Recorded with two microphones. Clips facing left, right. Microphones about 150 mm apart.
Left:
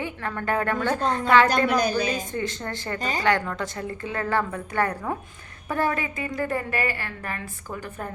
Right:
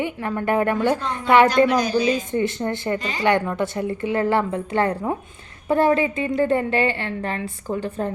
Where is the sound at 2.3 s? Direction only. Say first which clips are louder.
Right 7 dB; 15° right (ahead or behind).